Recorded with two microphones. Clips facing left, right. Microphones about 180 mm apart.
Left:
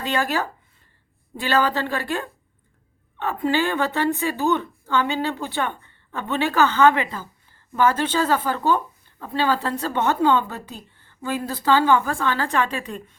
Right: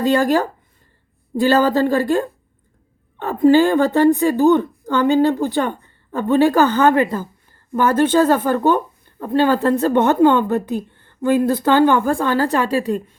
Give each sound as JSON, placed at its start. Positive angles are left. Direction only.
{"t": 0.0, "sound": "a woman's voice", "side_deg": -40}